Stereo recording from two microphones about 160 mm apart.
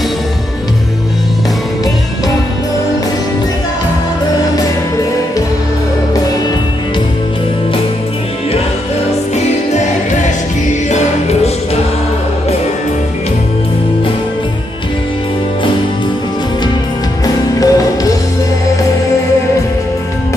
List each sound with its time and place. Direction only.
10.9 s music: 45° left (ahead or behind)
17.6 s music: 20° left (ahead or behind)